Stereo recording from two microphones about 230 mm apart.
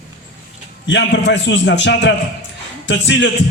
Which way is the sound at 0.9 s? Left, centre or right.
Left.